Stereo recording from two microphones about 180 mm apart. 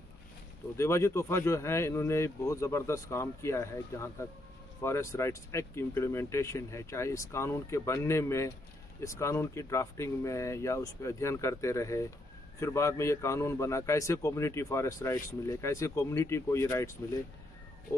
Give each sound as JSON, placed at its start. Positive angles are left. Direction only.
{"t": 0.7, "sound": "a man's voice", "side_deg": 15}